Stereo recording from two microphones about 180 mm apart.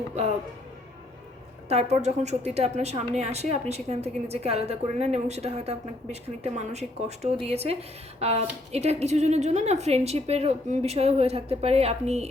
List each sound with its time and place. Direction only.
1.7 s a woman's voice: 35° right (ahead or behind)